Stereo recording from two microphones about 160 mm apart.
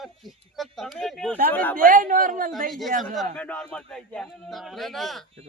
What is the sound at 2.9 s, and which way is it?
Speech, 55° right (ahead or behind).